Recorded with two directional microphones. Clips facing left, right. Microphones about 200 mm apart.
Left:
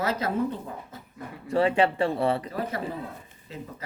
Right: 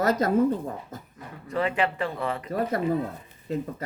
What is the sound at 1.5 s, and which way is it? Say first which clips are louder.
Speech: left 4 dB; 30° left (ahead or behind).